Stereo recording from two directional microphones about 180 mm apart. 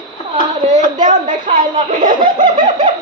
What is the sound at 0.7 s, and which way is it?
A woman's voice, 45° right (ahead or behind).